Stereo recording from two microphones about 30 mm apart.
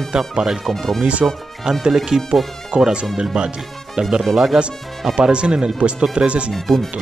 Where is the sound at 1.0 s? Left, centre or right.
Right.